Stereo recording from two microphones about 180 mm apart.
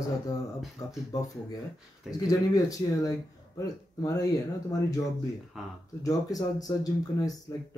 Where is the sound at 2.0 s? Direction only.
20° left (ahead or behind).